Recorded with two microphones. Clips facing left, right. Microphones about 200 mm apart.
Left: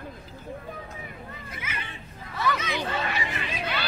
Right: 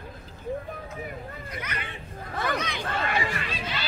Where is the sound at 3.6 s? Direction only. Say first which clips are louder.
Left 3 dB; 60° left (ahead or behind).